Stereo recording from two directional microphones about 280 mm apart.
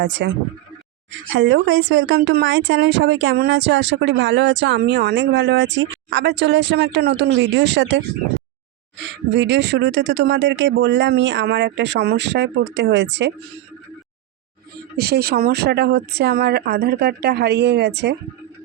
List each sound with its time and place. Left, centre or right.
0.0 s speech: right
14.9 s speech: right